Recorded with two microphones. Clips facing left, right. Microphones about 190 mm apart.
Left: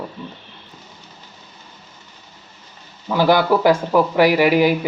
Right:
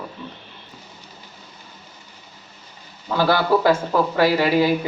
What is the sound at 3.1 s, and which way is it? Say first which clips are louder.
Speech: left 3 dB; 15° left (ahead or behind).